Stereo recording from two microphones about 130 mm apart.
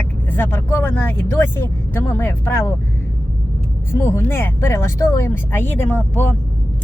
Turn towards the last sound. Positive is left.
turn(degrees=15)  # may be behind; listen again after turning